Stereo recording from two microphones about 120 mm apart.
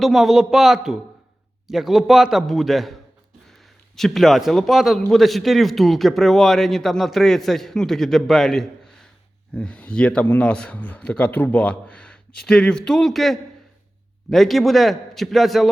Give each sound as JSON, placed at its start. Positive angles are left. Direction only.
{"t": 0.0, "sound": "a man's voice", "side_deg": 0}